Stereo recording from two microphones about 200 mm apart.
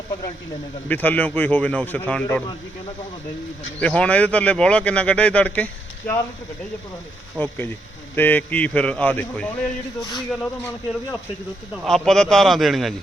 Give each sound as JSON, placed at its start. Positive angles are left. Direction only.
{"t": 0.9, "sound": "speech", "side_deg": 10}
{"t": 3.8, "sound": "speech", "side_deg": 5}
{"t": 7.3, "sound": "speech", "side_deg": 10}
{"t": 11.9, "sound": "a man's voice", "side_deg": 0}